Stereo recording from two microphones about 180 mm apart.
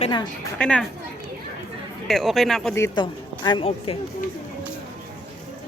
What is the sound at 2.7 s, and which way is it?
A woman's voice, 20° left (ahead or behind).